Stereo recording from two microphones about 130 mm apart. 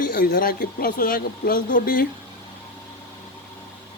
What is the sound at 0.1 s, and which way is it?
A woman's voice, 90° left.